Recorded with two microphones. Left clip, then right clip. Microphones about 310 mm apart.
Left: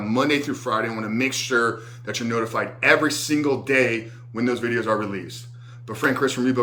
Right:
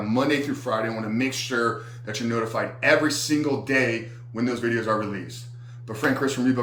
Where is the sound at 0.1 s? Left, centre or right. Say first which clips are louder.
Left 2 dB; centre.